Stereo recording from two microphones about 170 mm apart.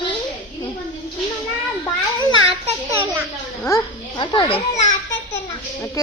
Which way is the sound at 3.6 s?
25° left (ahead or behind).